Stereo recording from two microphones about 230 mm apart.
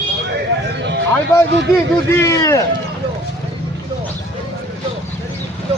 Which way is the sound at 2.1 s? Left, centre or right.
Centre.